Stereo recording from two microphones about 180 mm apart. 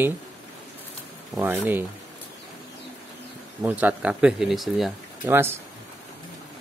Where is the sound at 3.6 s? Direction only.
10° right (ahead or behind).